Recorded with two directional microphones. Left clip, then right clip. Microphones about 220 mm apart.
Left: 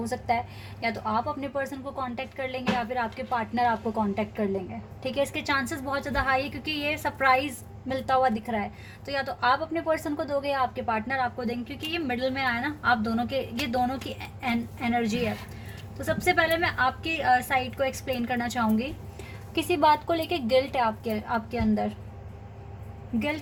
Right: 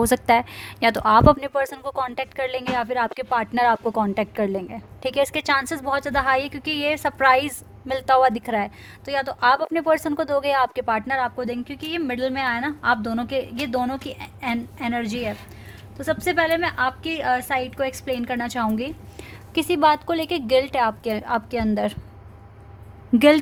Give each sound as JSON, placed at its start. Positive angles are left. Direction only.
{"t": 0.0, "sound": "a woman's voice", "side_deg": -45}
{"t": 23.1, "sound": "a woman's voice", "side_deg": -50}